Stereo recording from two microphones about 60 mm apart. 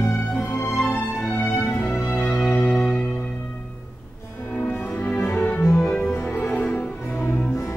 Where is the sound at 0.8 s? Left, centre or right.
Left.